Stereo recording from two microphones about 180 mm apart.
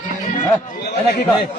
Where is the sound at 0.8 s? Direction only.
70° left (ahead or behind).